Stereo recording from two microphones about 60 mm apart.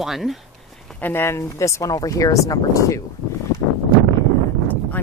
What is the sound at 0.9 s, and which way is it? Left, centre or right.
Speech, left.